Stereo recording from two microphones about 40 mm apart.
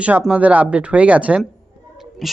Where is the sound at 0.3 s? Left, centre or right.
Right.